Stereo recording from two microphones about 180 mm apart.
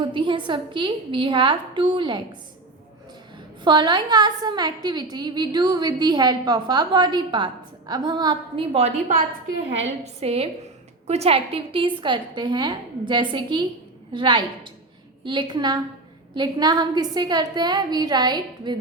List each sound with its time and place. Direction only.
0.0 s a woman's voice: 25° right (ahead or behind)
3.6 s a woman's voice: 25° right (ahead or behind)